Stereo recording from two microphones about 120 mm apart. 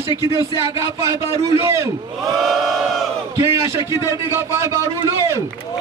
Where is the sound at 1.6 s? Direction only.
20° right (ahead or behind).